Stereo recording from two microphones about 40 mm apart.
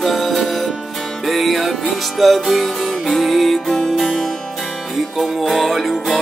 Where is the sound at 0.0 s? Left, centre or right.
Centre.